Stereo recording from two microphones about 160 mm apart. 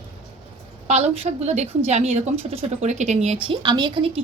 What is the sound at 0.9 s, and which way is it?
A woman's voice, 45° right (ahead or behind).